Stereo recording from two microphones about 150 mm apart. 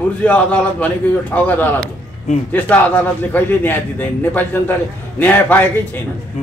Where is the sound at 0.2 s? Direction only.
10° left (ahead or behind).